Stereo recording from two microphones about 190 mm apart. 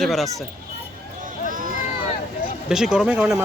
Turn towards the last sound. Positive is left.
turn(degrees=-10)  # may be behind; listen again after turning